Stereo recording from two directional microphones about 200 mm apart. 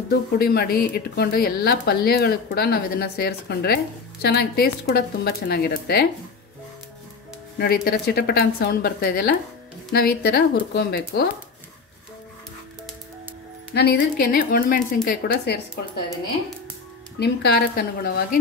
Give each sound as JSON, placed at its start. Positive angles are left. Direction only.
{"t": 0.1, "sound": "a woman's voice", "side_deg": 50}
{"t": 7.5, "sound": "a woman's voice", "side_deg": 50}
{"t": 13.7, "sound": "a woman's voice", "side_deg": 55}
{"t": 17.2, "sound": "a woman's voice", "side_deg": 55}